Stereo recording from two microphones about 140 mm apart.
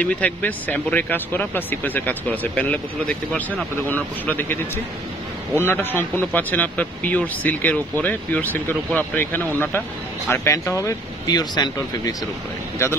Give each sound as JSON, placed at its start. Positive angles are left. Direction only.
{"t": 0.0, "sound": "speech", "side_deg": 10}